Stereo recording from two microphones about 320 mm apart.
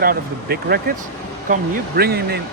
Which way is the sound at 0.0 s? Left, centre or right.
Right.